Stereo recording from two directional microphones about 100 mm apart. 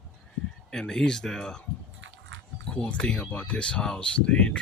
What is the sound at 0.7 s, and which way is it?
Speech, 5° left (ahead or behind).